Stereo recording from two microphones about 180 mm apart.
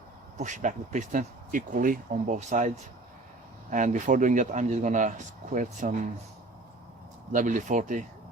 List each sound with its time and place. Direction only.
0.3 s speech: 40° right (ahead or behind)
7.3 s speech: 45° right (ahead or behind)